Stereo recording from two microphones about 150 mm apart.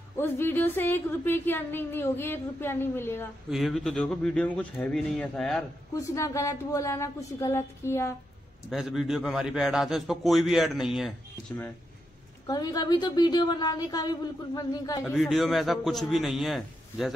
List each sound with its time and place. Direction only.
0.2 s a woman's voice: 15° left (ahead or behind)
3.4 s a man's voice: centre (ahead or behind)
5.9 s a woman's voice: 20° left (ahead or behind)
8.6 s a man's voice: centre (ahead or behind)
11.5 s a woman's voice: 15° left (ahead or behind)
12.4 s a woman's voice: 25° left (ahead or behind)
15.0 s a man's voice: centre (ahead or behind)